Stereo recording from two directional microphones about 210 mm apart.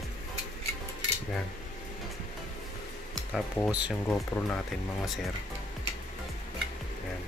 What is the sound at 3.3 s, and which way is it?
Speech, 5° right (ahead or behind).